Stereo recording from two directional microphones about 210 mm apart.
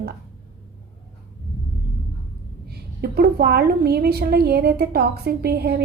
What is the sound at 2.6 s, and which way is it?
A woman's voice, 50° right (ahead or behind).